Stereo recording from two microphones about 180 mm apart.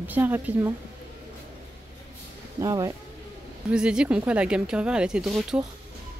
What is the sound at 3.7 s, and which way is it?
Speech, 5° right (ahead or behind).